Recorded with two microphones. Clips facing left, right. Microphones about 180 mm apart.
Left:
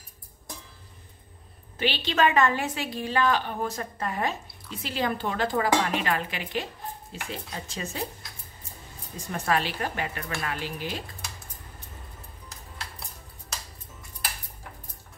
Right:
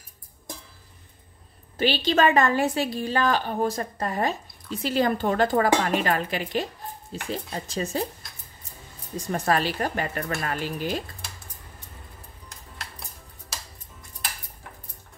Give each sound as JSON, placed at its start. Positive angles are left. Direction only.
{"t": 1.8, "sound": "speech", "side_deg": -40}
{"t": 9.3, "sound": "speech", "side_deg": -40}